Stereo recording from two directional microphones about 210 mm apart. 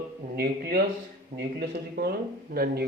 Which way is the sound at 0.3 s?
50° right (ahead or behind).